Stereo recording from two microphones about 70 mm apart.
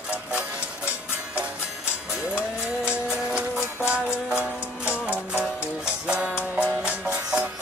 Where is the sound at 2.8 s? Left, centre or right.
Centre.